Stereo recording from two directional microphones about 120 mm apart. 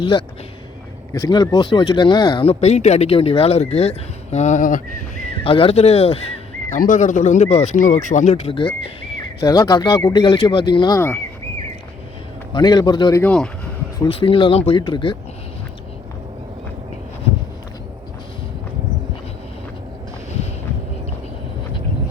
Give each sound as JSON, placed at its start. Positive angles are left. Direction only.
{"t": 0.0, "sound": "speech", "side_deg": 45}
{"t": 1.1, "sound": "speech", "side_deg": 30}
{"t": 5.4, "sound": "speech", "side_deg": 50}
{"t": 6.8, "sound": "speech", "side_deg": 90}
{"t": 9.4, "sound": "speech", "side_deg": 30}
{"t": 10.9, "sound": "speech", "side_deg": 15}
{"t": 12.5, "sound": "speech", "side_deg": 35}
{"t": 13.2, "sound": "speech", "side_deg": 5}
{"t": 14.1, "sound": "speech", "side_deg": 50}
{"t": 14.8, "sound": "speech", "side_deg": 40}